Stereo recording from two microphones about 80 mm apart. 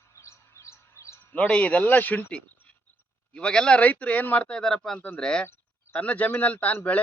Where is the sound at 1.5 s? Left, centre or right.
Centre.